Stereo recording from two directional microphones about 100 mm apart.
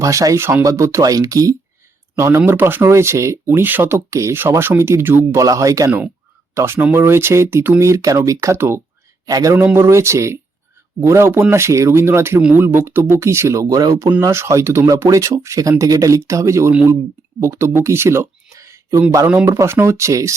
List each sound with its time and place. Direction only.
0.0 s speech: 35° right (ahead or behind)
5.4 s speech: 35° right (ahead or behind)